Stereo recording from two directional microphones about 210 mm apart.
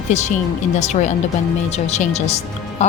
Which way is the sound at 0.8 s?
35° left (ahead or behind).